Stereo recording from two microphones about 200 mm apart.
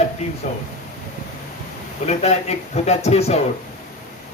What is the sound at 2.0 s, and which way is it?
A man's voice, 30° left (ahead or behind).